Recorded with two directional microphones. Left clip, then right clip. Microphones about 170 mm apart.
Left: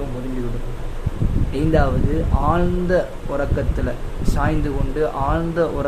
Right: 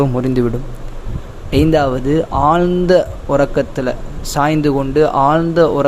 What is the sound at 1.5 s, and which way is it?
A man's voice, 45° right (ahead or behind).